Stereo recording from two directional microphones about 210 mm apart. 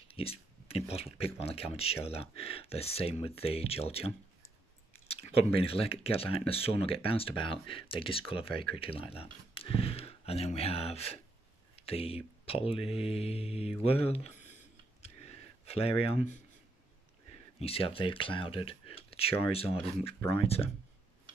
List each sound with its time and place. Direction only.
0.1 s speech: 25° left (ahead or behind)
4.9 s chewing: 30° left (ahead or behind)
5.5 s speech: 25° left (ahead or behind)
15.6 s speech: 30° left (ahead or behind)
17.6 s speech: 25° left (ahead or behind)